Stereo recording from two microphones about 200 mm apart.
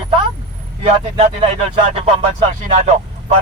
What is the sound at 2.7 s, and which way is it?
Speech, 35° right (ahead or behind).